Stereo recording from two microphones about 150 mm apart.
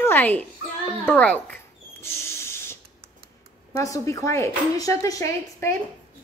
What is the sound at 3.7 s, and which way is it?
Speech, 20° left (ahead or behind).